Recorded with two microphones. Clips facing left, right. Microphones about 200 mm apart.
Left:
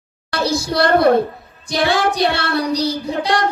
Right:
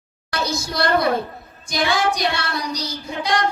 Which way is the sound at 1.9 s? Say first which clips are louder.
Left 3 dB; 60° left (ahead or behind).